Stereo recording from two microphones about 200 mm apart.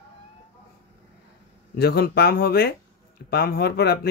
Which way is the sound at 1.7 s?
50° left (ahead or behind).